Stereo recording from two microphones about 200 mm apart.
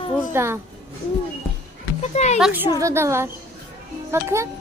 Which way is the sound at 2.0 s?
35° left (ahead or behind).